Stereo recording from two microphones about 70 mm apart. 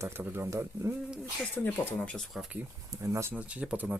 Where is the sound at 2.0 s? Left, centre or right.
Centre.